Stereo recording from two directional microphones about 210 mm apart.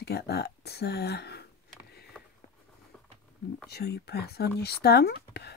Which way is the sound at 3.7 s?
50° left (ahead or behind).